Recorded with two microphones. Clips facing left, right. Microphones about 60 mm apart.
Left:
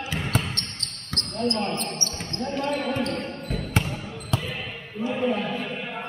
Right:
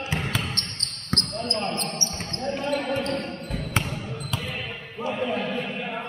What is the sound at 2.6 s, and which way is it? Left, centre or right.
Basketball bounce, centre.